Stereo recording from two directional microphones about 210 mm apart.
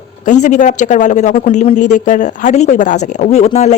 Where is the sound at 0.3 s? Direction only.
35° left (ahead or behind).